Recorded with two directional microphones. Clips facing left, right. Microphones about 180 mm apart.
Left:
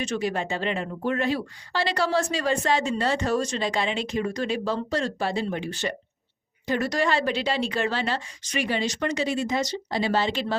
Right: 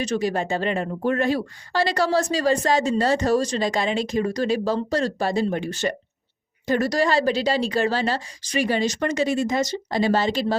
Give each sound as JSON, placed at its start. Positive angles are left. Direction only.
{"t": 0.0, "sound": "a woman's voice", "side_deg": -40}